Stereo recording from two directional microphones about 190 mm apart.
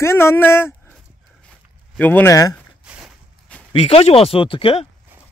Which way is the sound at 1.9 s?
10° left (ahead or behind).